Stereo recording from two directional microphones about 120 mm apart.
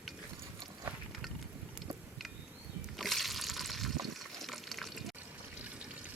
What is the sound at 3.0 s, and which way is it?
Water, centre (ahead or behind).